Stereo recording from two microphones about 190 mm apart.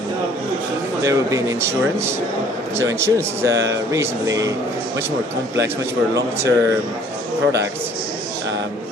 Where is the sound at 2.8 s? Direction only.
15° right (ahead or behind).